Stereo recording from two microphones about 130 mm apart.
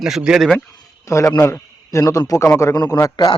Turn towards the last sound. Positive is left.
turn(degrees=25)  # may be behind; listen again after turning